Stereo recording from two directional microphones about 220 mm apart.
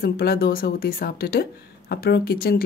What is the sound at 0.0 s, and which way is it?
Speech, 45° left (ahead or behind).